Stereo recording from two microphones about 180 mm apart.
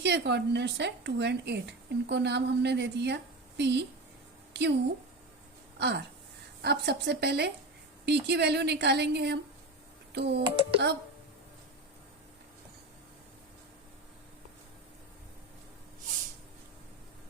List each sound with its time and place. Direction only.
0.0 s speech: 70° right (ahead or behind)
5.8 s speech: 70° right (ahead or behind)